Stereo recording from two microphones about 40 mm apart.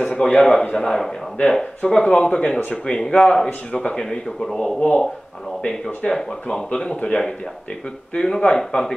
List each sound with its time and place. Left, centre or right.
0.0 s speech: centre